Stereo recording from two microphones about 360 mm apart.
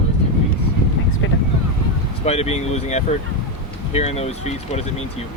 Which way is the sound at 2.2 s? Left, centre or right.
Centre.